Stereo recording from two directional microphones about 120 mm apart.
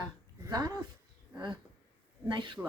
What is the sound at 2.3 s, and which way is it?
Speech, 40° right (ahead or behind).